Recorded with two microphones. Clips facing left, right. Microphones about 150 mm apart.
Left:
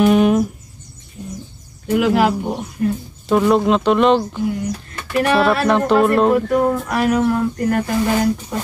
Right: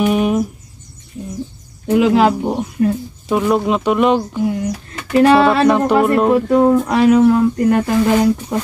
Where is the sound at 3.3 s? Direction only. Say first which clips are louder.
Left 1 dB; 5° right (ahead or behind).